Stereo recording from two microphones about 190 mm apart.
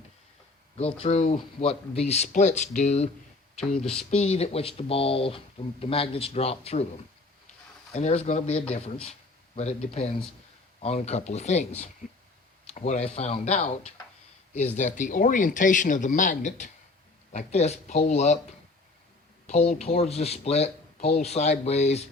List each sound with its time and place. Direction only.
0.8 s speech: 30° left (ahead or behind)
3.8 s speech: 5° left (ahead or behind)
4.1 s speech: 35° left (ahead or behind)
7.9 s speech: 35° left (ahead or behind)
12.7 s speech: 35° left (ahead or behind)
19.5 s speech: 35° left (ahead or behind)